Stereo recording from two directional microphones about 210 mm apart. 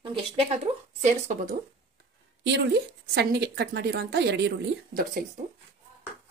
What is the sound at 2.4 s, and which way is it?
A woman's voice, 55° right (ahead or behind).